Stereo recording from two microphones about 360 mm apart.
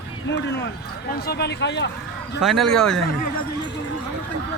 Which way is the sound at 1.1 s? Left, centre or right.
Left.